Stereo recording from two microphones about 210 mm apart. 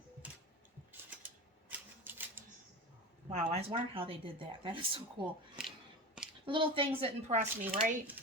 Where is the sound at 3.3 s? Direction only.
30° right (ahead or behind).